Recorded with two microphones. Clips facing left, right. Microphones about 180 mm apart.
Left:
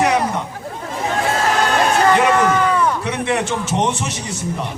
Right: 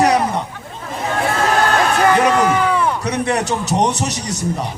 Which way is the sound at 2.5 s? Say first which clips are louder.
Even; 10° right (ahead or behind).